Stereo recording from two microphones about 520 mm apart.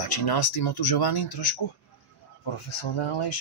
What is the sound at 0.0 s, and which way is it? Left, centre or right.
Speech, left.